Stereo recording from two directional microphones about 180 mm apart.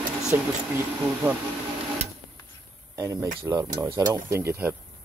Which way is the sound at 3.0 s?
20° right (ahead or behind).